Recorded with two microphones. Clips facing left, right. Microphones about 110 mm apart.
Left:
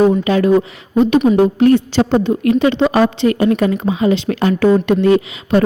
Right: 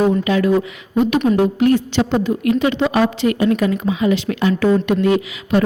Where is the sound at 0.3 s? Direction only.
35° left (ahead or behind).